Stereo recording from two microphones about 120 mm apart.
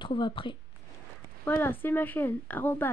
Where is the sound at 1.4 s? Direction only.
15° left (ahead or behind).